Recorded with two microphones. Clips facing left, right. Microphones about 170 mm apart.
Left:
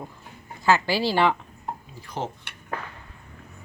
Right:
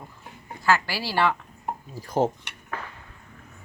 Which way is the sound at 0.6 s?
20° left (ahead or behind).